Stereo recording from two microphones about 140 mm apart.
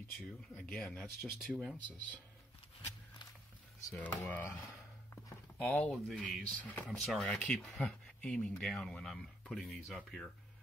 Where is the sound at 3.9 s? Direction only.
15° left (ahead or behind).